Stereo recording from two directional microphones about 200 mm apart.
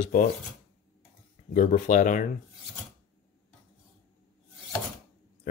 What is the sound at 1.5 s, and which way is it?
Speech, 40° left (ahead or behind).